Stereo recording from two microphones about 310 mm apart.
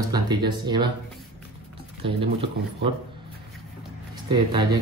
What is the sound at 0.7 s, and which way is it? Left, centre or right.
Speech, centre.